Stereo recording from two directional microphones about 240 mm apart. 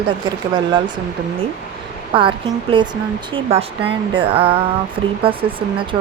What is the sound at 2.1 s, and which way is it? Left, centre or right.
Speech, right.